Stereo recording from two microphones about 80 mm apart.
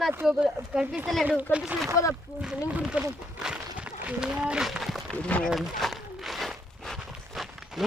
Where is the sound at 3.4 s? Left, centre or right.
Centre.